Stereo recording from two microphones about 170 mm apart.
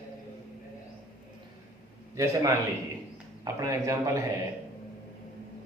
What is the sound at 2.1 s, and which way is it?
A man's voice, 20° right (ahead or behind).